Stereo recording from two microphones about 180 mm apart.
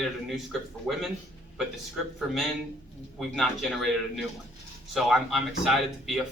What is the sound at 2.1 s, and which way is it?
Speech, centre (ahead or behind).